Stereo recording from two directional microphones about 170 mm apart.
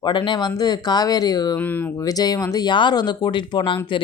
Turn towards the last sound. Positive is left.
turn(degrees=30)  # may be behind; listen again after turning